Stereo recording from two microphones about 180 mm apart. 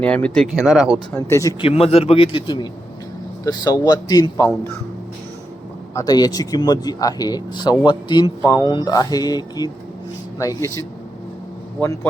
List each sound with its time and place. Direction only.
0.0 s speech: 5° left (ahead or behind)
1.1 s speech: 15° left (ahead or behind)
1.6 s a man's voice: 35° left (ahead or behind)
5.9 s speech: 20° left (ahead or behind)